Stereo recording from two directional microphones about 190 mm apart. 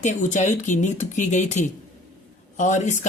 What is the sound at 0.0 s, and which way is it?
Speech, 40° left (ahead or behind).